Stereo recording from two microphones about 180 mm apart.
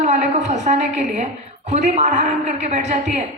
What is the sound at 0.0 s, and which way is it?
A woman's voice, 40° right (ahead or behind).